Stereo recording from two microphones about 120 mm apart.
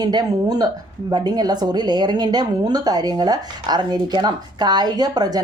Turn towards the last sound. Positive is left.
turn(degrees=-35)  # may be behind; listen again after turning